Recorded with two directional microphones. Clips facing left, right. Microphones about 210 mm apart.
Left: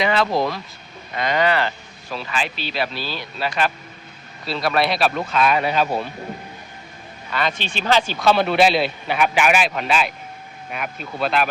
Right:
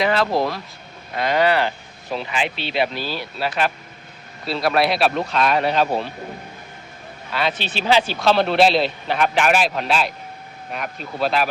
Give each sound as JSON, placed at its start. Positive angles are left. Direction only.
{"t": 0.0, "sound": "speech", "side_deg": 0}
{"t": 2.0, "sound": "speech", "side_deg": -20}
{"t": 7.3, "sound": "speech", "side_deg": -5}
{"t": 7.6, "sound": "speech", "side_deg": -35}
{"t": 7.9, "sound": "speech", "side_deg": -10}